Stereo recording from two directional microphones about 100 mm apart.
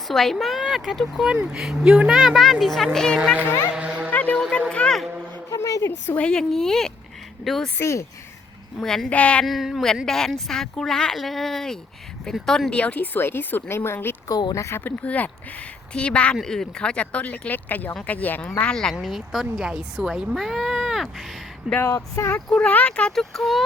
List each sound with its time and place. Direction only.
0.1 s speech: centre (ahead or behind)
3.8 s music: 10° right (ahead or behind)
4.1 s a sound: 15° left (ahead or behind)
4.7 s speech: 10° left (ahead or behind)
5.5 s a sound: 35° left (ahead or behind)
6.1 s speech: 10° left (ahead or behind)
7.8 s speech: 30° left (ahead or behind)
8.8 s speech: 5° left (ahead or behind)
9.5 s speech: centre (ahead or behind); by 14.2 s 25° left (ahead or behind)
14.3 s speech: 40° left (ahead or behind)
15.0 s speech: 15° left (ahead or behind)
18.6 s speech: 5° left (ahead or behind)
21.8 s speech: 30° left (ahead or behind)
22.4 s speech: 10° left (ahead or behind)